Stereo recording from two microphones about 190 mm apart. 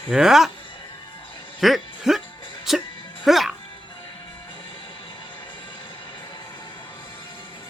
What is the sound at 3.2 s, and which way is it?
Speech, centre (ahead or behind).